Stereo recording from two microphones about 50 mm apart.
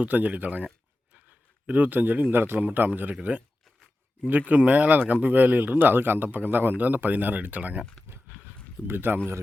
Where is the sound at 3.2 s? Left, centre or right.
Right.